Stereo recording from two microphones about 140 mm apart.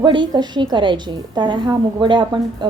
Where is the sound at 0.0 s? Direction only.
35° right (ahead or behind).